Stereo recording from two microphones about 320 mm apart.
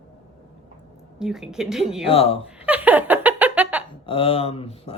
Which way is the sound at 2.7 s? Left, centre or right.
Centre.